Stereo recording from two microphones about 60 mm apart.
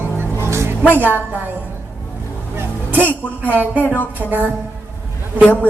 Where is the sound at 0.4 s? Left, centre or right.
Right.